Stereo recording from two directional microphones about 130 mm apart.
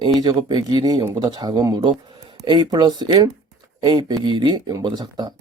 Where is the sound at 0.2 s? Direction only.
35° right (ahead or behind).